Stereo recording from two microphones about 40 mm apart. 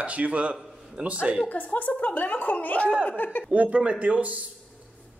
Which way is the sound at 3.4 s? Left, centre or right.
Right.